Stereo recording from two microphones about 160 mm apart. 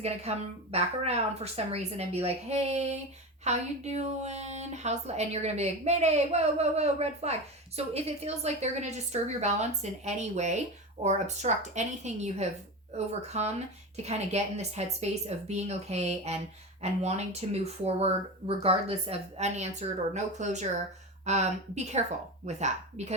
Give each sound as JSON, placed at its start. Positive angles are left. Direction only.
{"t": 0.0, "sound": "a woman's voice", "side_deg": -40}